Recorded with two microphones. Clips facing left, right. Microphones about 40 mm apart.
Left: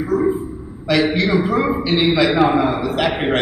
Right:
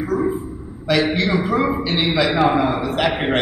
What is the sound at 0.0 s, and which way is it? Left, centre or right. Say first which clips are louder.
A man's voice: left 3 dB; centre.